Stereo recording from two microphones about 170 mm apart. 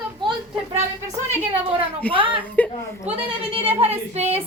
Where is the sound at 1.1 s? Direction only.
15° right (ahead or behind).